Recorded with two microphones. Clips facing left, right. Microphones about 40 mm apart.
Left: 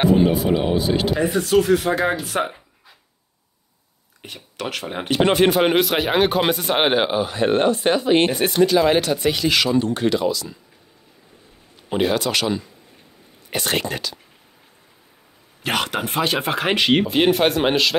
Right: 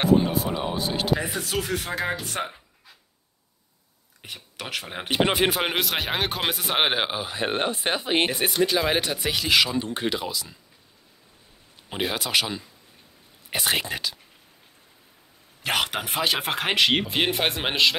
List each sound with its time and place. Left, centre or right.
0.0 s speech: centre
4.2 s speech: centre
8.3 s speech: centre
9.8 s speech: centre
11.9 s speech: centre
15.6 s speech: centre